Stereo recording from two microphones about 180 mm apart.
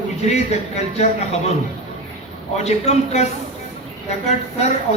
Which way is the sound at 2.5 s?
40° left (ahead or behind).